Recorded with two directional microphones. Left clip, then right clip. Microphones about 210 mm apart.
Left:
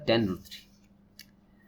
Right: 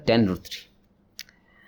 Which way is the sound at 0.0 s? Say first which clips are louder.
Right 5 dB; 50° right (ahead or behind).